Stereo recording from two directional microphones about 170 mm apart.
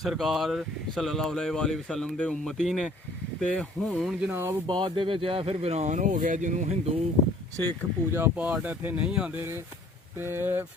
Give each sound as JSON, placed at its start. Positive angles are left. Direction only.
{"t": 0.0, "sound": "speech", "side_deg": 0}
{"t": 4.6, "sound": "speech", "side_deg": -25}
{"t": 8.1, "sound": "speech", "side_deg": -10}